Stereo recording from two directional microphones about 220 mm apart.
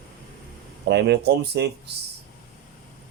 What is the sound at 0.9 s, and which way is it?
Speech, 50° right (ahead or behind).